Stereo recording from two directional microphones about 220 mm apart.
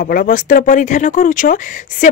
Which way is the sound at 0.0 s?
40° left (ahead or behind).